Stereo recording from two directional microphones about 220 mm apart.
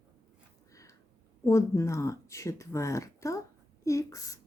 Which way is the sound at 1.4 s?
15° left (ahead or behind).